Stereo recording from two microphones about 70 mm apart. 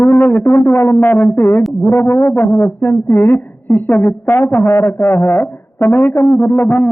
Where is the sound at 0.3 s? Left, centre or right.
Left.